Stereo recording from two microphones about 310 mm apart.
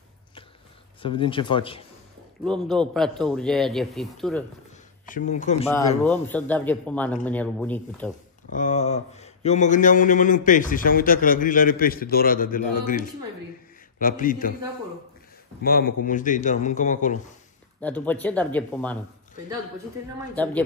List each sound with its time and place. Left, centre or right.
1.0 s speech: centre
2.4 s a man's voice: centre
5.0 s speech: left
5.7 s a man's voice: centre
8.5 s speech: left
15.6 s speech: left
17.7 s a man's voice: centre